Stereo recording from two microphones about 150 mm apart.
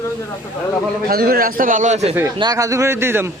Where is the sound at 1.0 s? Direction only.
90° right; by 2.2 s 50° right (ahead or behind).